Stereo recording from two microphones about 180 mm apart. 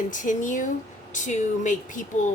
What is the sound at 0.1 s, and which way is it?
A woman's voice, 45° left (ahead or behind).